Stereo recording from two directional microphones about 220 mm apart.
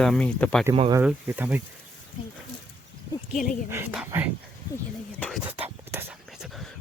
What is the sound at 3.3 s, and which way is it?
Speech, 35° left (ahead or behind).